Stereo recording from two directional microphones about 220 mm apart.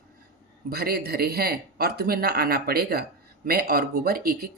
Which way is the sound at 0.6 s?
45° right (ahead or behind).